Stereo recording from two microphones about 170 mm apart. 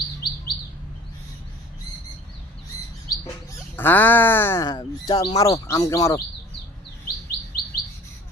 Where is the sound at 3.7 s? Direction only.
10° left (ahead or behind).